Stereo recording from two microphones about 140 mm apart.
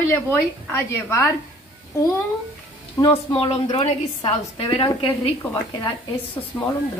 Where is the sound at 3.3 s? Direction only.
40° left (ahead or behind).